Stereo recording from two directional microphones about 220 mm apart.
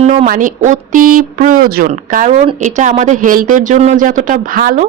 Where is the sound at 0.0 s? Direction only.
30° right (ahead or behind).